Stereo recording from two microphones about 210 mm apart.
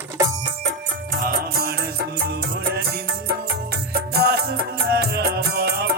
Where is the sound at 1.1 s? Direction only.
45° right (ahead or behind).